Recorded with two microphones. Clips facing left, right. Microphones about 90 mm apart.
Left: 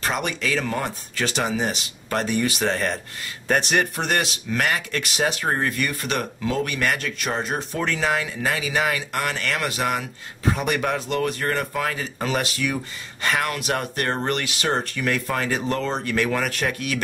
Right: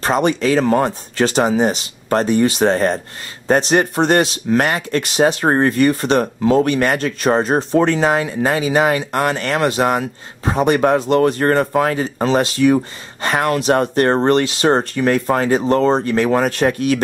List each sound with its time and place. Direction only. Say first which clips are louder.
0.0 s speech: right 10 dB; 35° right (ahead or behind)